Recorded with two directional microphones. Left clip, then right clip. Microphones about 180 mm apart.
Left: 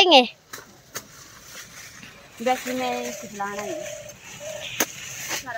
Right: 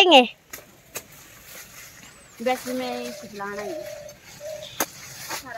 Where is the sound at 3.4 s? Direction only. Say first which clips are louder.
Left 2 dB; 20° right (ahead or behind).